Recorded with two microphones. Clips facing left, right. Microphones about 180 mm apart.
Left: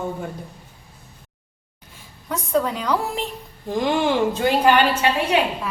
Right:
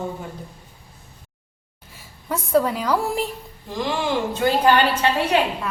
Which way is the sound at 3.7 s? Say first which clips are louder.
Left 4 dB; 50° left (ahead or behind).